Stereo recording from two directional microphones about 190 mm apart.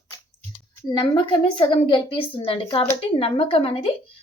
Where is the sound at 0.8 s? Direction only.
25° left (ahead or behind).